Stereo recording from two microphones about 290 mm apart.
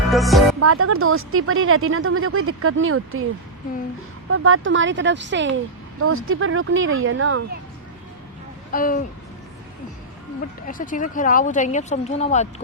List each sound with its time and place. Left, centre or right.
0.1 s speech: centre
0.6 s speech: right
4.3 s speech: right
8.7 s speech: left
10.7 s speech: left